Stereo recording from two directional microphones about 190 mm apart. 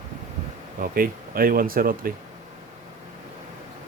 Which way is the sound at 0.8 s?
50° right (ahead or behind).